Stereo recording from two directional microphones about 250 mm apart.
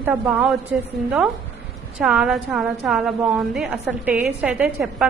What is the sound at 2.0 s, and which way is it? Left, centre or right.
A woman's voice, centre.